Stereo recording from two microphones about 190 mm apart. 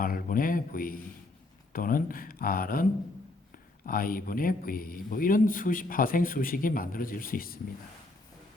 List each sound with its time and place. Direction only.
0.0 s a man's voice: 50° left (ahead or behind)
3.8 s a man's voice: 50° left (ahead or behind)